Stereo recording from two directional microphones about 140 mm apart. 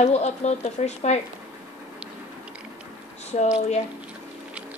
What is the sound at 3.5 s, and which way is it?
Speech, 50° left (ahead or behind).